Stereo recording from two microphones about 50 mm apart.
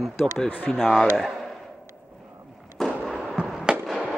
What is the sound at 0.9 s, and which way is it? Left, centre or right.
Speech, centre.